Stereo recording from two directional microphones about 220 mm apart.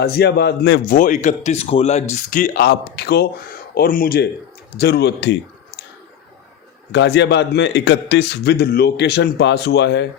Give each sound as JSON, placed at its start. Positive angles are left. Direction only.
{"t": 0.0, "sound": "a man's voice", "side_deg": 45}
{"t": 0.9, "sound": "a man's voice", "side_deg": 35}
{"t": 6.9, "sound": "a man's voice", "side_deg": 50}